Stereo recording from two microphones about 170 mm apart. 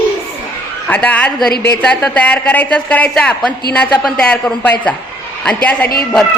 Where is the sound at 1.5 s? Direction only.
70° left (ahead or behind).